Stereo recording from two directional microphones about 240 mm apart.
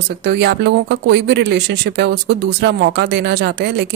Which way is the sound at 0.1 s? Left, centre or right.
Right.